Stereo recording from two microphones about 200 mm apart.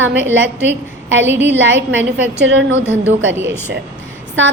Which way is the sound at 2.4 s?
65° right (ahead or behind).